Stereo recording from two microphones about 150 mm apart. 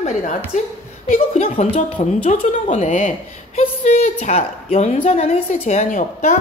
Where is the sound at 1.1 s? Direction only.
45° left (ahead or behind).